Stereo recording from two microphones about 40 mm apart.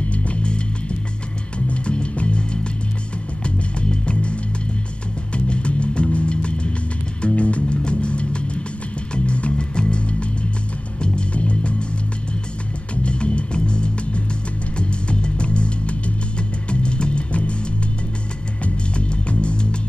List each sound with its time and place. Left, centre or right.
0.1 s music: left
1.7 s music: left
12.9 s music: left
18.9 s music: left